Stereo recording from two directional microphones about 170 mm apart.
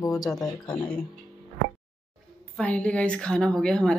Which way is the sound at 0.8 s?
10° left (ahead or behind).